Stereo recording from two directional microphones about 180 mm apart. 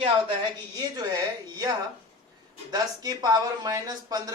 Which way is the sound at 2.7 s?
20° right (ahead or behind).